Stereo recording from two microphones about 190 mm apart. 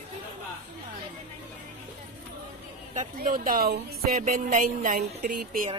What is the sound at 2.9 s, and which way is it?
Speech, 45° right (ahead or behind).